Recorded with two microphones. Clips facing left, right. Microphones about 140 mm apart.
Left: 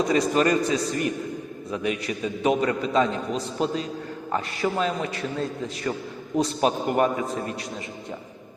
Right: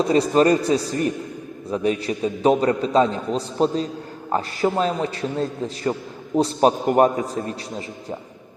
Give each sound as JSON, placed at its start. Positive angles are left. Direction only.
{"t": 0.0, "sound": "a man's voice", "side_deg": -30}